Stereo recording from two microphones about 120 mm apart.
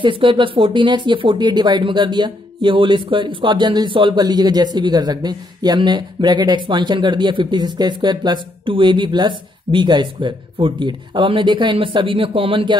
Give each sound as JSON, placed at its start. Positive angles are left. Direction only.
{"t": 0.0, "sound": "speech", "side_deg": -45}